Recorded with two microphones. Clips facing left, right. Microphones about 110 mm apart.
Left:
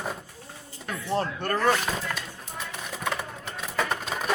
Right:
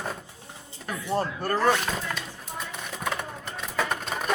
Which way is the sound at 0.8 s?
10° right (ahead or behind).